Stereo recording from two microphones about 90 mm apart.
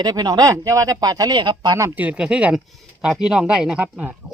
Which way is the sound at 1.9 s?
15° right (ahead or behind).